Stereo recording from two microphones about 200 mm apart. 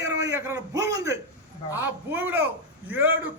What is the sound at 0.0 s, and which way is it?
A man's voice, 15° right (ahead or behind).